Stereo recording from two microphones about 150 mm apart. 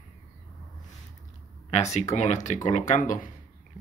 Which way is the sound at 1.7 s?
50° left (ahead or behind).